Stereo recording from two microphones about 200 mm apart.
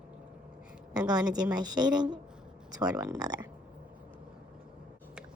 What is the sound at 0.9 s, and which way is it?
A woman's voice, 20° right (ahead or behind).